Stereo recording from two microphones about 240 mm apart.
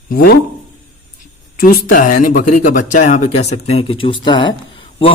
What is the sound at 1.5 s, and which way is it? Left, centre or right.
Speech, left.